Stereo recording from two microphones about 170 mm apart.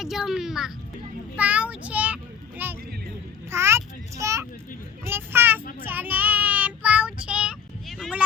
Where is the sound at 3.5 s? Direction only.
15° right (ahead or behind).